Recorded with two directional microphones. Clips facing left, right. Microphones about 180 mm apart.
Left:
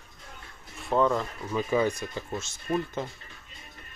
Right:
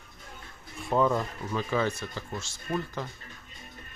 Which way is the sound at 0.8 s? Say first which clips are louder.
Left 1 dB; centre (ahead or behind).